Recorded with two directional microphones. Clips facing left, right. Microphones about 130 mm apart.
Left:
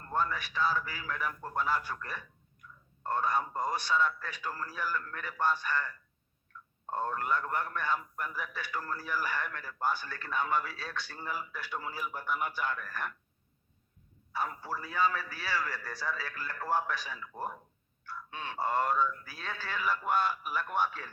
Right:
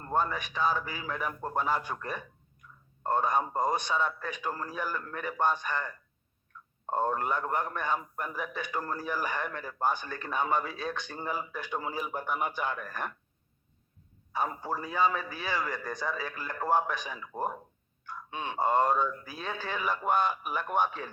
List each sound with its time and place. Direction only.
0.0 s a man's voice: 20° right (ahead or behind)
14.3 s a man's voice: 20° right (ahead or behind)